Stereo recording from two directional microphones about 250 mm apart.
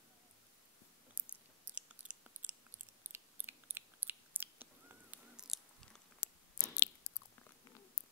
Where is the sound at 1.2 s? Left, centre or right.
Centre.